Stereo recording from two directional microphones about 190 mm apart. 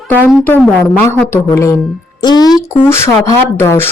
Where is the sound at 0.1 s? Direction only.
10° left (ahead or behind).